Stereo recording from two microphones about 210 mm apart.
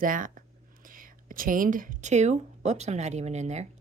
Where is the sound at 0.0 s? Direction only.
40° right (ahead or behind).